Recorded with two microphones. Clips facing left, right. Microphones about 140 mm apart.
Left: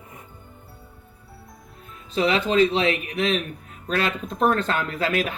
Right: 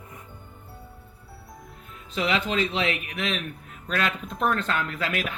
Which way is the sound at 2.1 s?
35° left (ahead or behind).